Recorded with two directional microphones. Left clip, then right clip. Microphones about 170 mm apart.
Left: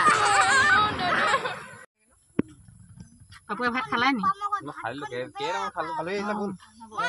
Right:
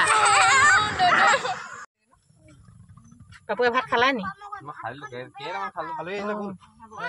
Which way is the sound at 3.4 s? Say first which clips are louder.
Right 5 dB; 25° right (ahead or behind).